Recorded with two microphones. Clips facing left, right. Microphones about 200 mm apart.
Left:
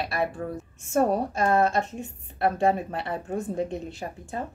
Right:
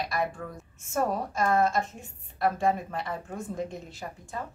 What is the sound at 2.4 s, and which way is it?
A woman's voice, 30° left (ahead or behind).